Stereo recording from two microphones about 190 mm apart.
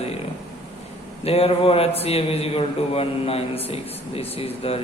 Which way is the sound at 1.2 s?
30° left (ahead or behind).